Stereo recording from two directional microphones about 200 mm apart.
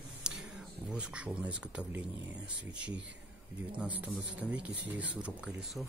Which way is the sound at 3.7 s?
5° right (ahead or behind).